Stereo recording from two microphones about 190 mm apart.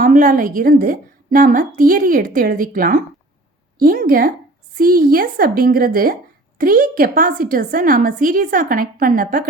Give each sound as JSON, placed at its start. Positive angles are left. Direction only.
{"t": 0.0, "sound": "a woman's voice", "side_deg": -45}